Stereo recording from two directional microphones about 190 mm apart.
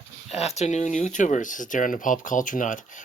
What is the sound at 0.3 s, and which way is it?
Speech, 35° left (ahead or behind).